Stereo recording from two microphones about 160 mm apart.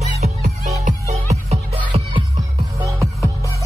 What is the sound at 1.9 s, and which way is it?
Music, 40° right (ahead or behind).